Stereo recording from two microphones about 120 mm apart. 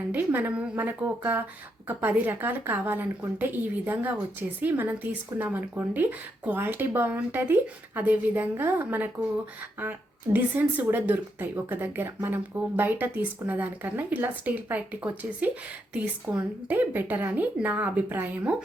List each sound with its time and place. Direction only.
0.1 s speech: 15° right (ahead or behind)
10.3 s speech: 15° right (ahead or behind)